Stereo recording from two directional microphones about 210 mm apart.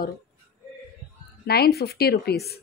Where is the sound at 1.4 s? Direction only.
50° left (ahead or behind).